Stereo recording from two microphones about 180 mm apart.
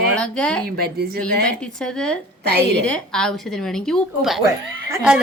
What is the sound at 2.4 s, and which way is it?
Speech, 65° right (ahead or behind).